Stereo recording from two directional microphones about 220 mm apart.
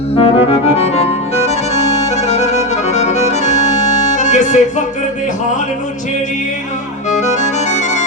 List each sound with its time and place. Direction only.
0.2 s music: 25° left (ahead or behind)
1.5 s accordion: 30° left (ahead or behind)
7.1 s accordion: 30° left (ahead or behind)